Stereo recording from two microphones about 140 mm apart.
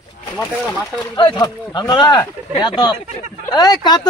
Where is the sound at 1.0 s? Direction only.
30° left (ahead or behind).